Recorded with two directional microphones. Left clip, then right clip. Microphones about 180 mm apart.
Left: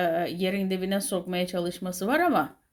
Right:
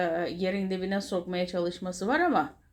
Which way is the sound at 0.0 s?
40° left (ahead or behind).